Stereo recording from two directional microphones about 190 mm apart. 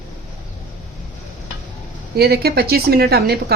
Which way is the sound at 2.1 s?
55° right (ahead or behind).